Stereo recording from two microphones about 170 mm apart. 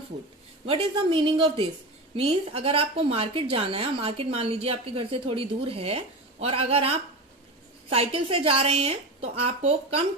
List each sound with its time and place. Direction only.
0.7 s a woman's voice: 35° right (ahead or behind)